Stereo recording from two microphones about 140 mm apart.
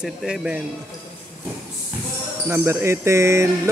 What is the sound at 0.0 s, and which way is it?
Speech, 5° right (ahead or behind).